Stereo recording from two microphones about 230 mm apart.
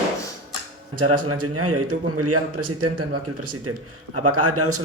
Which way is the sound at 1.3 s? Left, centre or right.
Right.